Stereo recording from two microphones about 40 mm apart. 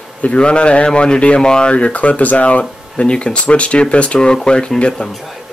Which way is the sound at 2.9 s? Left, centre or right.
Left.